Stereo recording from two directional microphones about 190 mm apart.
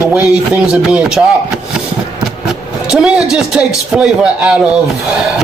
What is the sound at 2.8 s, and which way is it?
Speech, 5° right (ahead or behind).